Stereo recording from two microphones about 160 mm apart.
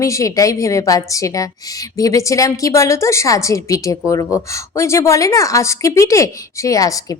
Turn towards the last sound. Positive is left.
turn(degrees=20)  # may be behind; listen again after turning